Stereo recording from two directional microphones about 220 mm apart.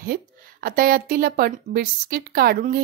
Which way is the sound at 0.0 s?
45° right (ahead or behind).